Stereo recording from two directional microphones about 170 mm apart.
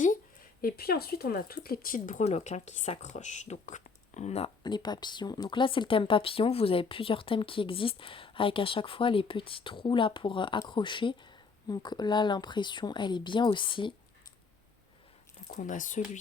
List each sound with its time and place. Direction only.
0.6 s speech: 65° left (ahead or behind); by 4.5 s 40° left (ahead or behind)
4.6 s speech: 25° left (ahead or behind)
15.4 s speech: 50° left (ahead or behind)